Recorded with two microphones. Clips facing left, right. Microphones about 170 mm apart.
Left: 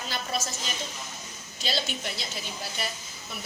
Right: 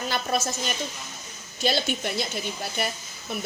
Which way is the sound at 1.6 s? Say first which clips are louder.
Right 6 dB; 55° right (ahead or behind).